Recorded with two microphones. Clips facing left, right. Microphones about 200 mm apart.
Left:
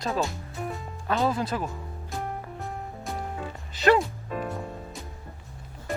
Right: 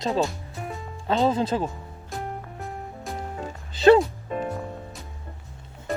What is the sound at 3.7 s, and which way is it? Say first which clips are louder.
Music: right 6 dB; 30° right (ahead or behind).